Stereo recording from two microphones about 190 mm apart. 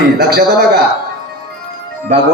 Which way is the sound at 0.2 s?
55° right (ahead or behind).